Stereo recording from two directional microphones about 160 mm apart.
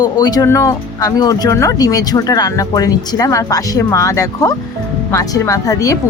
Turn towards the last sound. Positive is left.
turn(degrees=20)  # may be behind; listen again after turning